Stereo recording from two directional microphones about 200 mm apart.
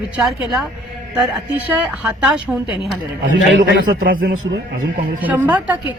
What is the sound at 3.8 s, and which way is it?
Speech, 45° right (ahead or behind).